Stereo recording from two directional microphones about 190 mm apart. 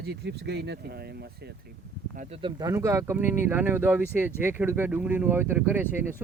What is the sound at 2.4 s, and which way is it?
Speech, 25° right (ahead or behind).